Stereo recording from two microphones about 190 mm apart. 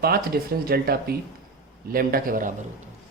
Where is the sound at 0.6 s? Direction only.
50° right (ahead or behind).